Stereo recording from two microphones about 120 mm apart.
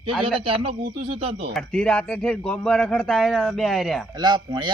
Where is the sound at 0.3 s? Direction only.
50° right (ahead or behind).